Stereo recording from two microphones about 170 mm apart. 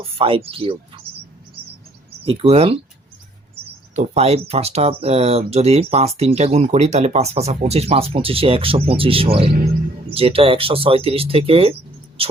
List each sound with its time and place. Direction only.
0.0 s speech: 35° right (ahead or behind)
2.2 s speech: 35° right (ahead or behind)